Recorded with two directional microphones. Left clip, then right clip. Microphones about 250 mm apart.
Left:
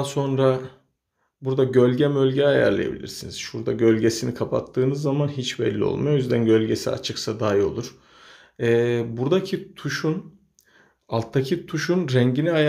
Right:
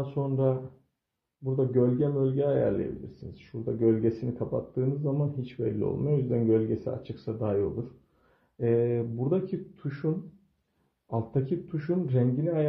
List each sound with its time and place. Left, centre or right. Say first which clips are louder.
0.1 s speech: left 8 dB; centre
8.5 s speech: left 6 dB; centre